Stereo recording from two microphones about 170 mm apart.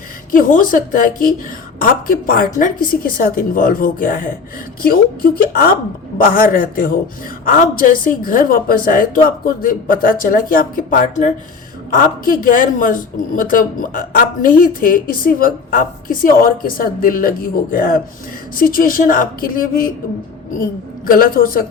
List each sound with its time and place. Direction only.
0.3 s a woman's voice: 55° left (ahead or behind)
21.1 s speech: 60° left (ahead or behind)